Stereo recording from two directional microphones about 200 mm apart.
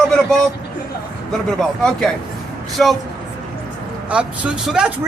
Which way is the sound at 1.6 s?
Centre (ahead or behind).